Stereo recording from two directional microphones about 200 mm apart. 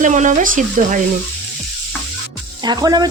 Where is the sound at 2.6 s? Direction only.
20° right (ahead or behind).